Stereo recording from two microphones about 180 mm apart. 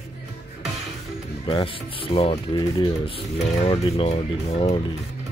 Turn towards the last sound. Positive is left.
turn(degrees=35)  # may be behind; listen again after turning